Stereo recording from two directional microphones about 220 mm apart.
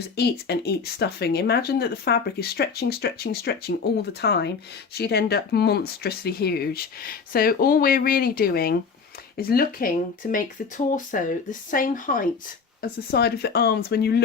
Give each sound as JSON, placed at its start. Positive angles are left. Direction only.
{"t": 0.2, "sound": "speech", "side_deg": 50}